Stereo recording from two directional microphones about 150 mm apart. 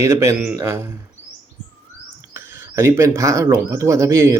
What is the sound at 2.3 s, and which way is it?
Speech, 15° right (ahead or behind).